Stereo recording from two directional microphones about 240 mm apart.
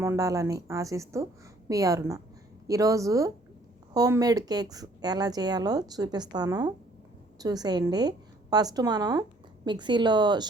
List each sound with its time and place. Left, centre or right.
0.0 s speech: centre